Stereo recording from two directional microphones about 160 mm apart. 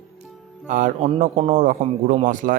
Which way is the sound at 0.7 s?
50° right (ahead or behind).